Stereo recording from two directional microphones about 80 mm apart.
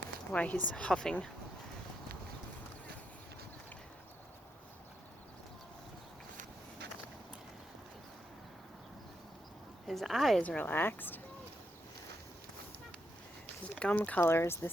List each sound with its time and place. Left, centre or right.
0.3 s speech: centre
9.8 s a woman's voice: centre
10.4 s speech: left
13.7 s speech: centre; by 14.7 s left